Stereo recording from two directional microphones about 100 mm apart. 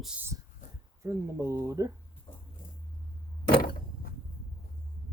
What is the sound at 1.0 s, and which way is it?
Speech, 30° right (ahead or behind).